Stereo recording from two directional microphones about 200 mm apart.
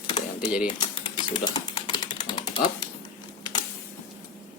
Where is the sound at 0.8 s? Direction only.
25° left (ahead or behind).